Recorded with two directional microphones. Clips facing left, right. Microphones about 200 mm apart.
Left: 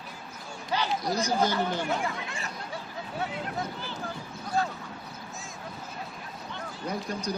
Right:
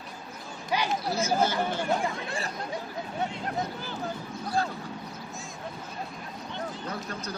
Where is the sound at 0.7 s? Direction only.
10° right (ahead or behind).